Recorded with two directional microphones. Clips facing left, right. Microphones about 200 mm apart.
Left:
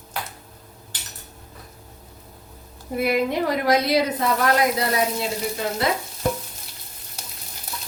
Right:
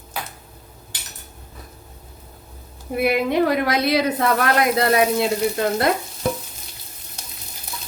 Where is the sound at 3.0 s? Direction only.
65° right (ahead or behind).